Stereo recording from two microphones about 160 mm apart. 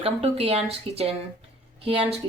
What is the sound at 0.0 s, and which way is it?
Speech, 40° right (ahead or behind).